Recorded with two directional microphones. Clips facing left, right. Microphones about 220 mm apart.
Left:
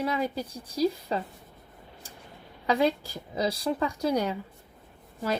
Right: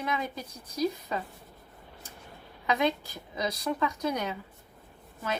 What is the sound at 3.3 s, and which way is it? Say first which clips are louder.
Speech: left 3 dB; 30° left (ahead or behind).